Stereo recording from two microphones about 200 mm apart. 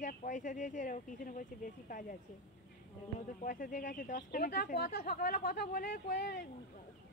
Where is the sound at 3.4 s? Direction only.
45° left (ahead or behind).